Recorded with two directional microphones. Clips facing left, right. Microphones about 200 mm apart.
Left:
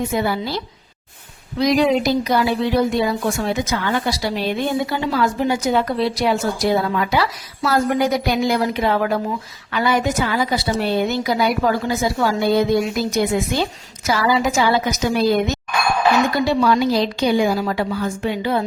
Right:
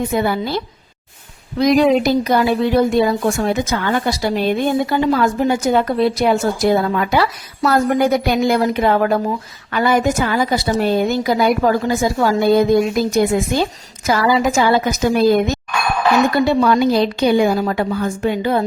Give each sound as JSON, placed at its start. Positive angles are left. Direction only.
{"t": 0.1, "sound": "a woman's voice", "side_deg": -55}